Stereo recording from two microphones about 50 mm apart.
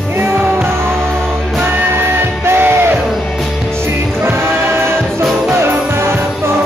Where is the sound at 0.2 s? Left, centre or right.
Right.